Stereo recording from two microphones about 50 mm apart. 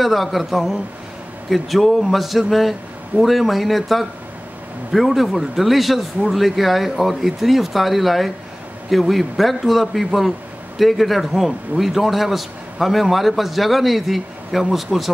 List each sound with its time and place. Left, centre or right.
0.0 s a man's voice: centre